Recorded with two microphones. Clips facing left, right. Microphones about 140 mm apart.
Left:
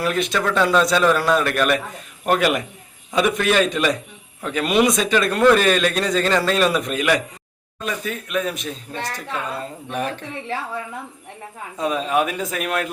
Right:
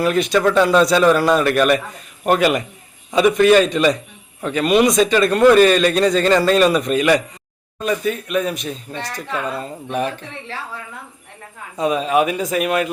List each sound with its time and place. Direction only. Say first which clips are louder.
0.0 s speech: right 5 dB; centre (ahead or behind)
11.8 s speech: right 4 dB; 5° right (ahead or behind)